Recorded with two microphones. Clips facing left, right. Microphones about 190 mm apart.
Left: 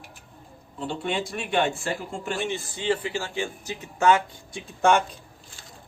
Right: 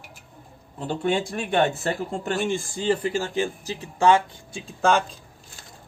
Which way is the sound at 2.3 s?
45° right (ahead or behind).